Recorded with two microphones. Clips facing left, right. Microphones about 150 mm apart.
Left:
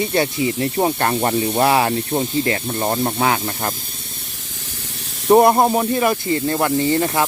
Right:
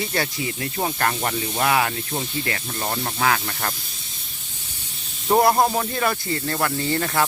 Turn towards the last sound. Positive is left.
turn(degrees=20)  # may be behind; listen again after turning